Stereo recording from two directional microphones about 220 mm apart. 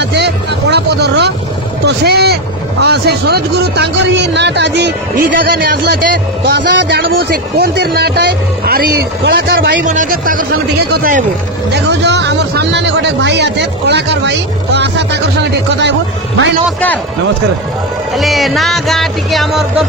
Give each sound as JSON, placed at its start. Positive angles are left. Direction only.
{"t": 0.0, "sound": "music", "side_deg": -50}
{"t": 1.9, "sound": "speech", "side_deg": -45}
{"t": 9.8, "sound": "speech", "side_deg": -35}
{"t": 11.7, "sound": "speech", "side_deg": -50}
{"t": 16.6, "sound": "a man's voice", "side_deg": 5}
{"t": 18.1, "sound": "music", "side_deg": 0}